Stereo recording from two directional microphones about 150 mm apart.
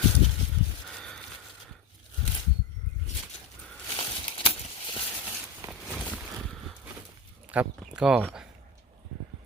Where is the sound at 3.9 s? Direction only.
35° left (ahead or behind).